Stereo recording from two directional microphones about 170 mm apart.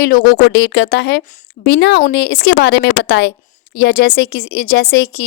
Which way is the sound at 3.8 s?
65° left (ahead or behind).